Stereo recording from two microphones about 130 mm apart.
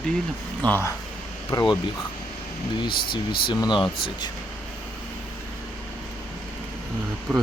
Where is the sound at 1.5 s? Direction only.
30° left (ahead or behind).